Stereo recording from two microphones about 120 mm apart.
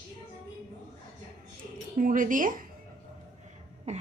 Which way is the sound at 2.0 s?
90° right.